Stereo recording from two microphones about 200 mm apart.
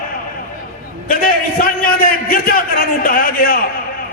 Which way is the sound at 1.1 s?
45° left (ahead or behind).